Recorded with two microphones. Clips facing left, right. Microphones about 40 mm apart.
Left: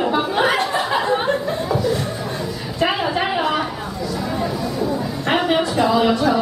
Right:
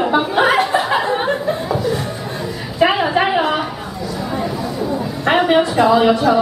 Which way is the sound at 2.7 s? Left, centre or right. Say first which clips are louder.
Right 5 dB; centre.